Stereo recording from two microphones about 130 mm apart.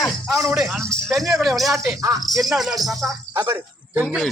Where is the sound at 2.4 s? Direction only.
Centre (ahead or behind).